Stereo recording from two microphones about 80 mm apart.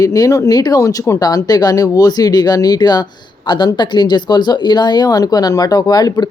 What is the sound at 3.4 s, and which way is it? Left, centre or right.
Speech, left.